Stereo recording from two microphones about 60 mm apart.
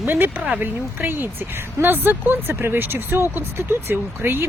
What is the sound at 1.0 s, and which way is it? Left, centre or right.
Speech, right.